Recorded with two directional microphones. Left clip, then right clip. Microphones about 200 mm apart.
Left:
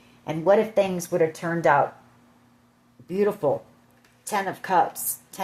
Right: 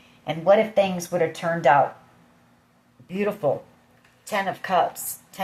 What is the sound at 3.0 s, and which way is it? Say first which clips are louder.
Speech: left 1 dB; 45° left (ahead or behind).